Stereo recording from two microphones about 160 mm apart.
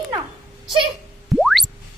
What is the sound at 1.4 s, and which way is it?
Music, centre (ahead or behind).